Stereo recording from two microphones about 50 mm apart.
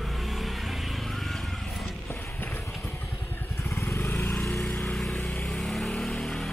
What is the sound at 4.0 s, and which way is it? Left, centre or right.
Vehicle, left.